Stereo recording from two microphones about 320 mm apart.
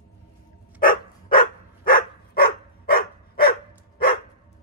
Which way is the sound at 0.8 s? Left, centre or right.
Left.